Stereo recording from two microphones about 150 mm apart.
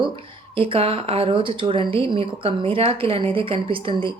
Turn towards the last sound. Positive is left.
turn(degrees=-35)  # may be behind; listen again after turning